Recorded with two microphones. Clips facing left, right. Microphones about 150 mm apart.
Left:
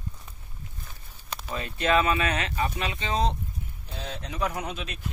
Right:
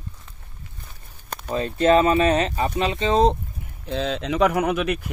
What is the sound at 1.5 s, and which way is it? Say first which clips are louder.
Speech: right 7 dB; 35° right (ahead or behind).